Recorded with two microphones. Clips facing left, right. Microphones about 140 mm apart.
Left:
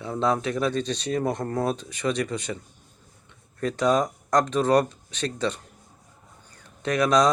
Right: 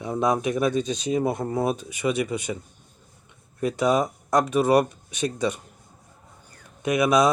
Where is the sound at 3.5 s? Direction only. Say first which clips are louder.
Right 1 dB; 10° right (ahead or behind).